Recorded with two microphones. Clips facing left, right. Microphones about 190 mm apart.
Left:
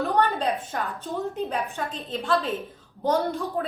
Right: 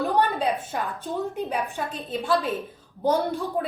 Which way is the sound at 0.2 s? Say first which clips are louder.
Even; 10° right (ahead or behind).